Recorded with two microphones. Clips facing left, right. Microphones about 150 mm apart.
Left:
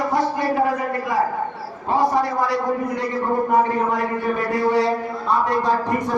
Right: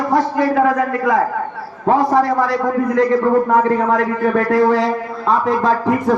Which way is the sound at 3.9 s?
90° right.